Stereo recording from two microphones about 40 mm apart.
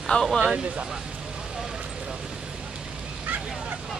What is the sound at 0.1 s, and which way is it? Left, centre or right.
Speech, left.